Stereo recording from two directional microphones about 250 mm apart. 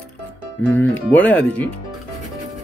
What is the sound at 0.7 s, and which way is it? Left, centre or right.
Speech, centre.